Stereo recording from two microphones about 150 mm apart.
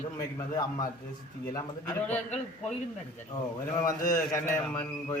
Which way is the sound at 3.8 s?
20° left (ahead or behind).